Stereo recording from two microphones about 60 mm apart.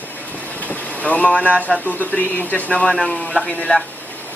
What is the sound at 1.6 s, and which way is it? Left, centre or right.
Speech, left.